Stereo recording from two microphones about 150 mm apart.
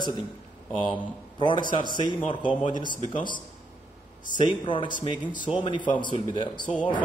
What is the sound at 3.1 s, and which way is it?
Speech, 30° left (ahead or behind).